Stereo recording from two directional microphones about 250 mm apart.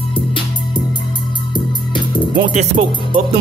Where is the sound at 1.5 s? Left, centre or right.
Centre.